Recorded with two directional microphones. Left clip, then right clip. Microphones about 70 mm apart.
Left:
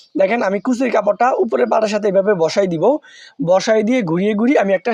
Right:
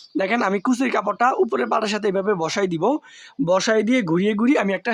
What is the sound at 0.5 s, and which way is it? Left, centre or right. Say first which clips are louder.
Speech: left 3 dB; left.